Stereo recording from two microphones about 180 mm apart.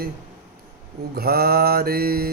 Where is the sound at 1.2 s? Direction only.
60° right (ahead or behind).